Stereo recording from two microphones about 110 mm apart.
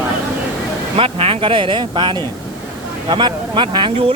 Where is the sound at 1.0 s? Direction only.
60° right (ahead or behind).